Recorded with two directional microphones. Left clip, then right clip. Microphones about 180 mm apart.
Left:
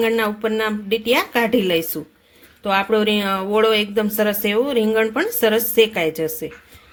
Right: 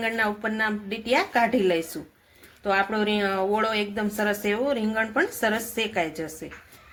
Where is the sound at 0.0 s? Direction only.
55° left (ahead or behind).